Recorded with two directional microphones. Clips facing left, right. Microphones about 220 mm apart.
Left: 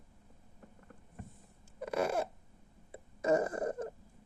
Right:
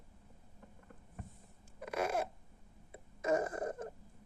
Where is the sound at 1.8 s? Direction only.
30° left (ahead or behind).